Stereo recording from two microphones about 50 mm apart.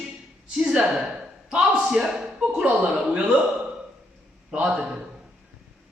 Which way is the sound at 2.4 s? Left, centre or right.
Right.